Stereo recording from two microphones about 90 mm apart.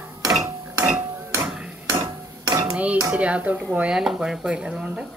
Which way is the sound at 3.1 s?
15° right (ahead or behind).